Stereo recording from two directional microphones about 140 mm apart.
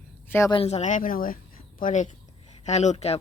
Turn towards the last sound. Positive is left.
turn(degrees=50)  # may be behind; listen again after turning